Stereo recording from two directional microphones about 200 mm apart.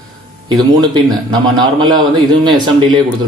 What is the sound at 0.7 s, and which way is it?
Speech, 20° right (ahead or behind).